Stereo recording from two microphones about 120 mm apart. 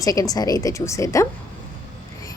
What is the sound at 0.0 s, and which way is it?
A woman's voice, 30° left (ahead or behind).